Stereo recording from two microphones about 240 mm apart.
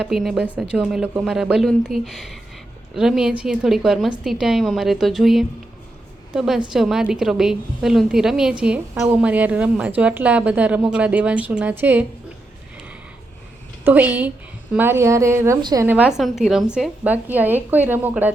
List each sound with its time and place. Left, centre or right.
0.0 s a woman's voice: centre
13.8 s a woman's voice: centre